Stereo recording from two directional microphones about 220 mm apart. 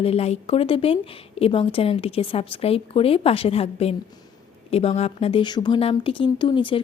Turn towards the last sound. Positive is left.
turn(degrees=20)  # may be behind; listen again after turning